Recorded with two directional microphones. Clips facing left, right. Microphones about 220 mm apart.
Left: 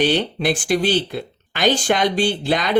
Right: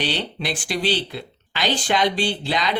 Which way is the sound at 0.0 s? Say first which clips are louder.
Left 8 dB; 50° left (ahead or behind).